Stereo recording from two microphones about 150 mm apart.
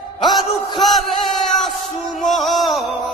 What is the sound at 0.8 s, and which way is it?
Music, centre (ahead or behind).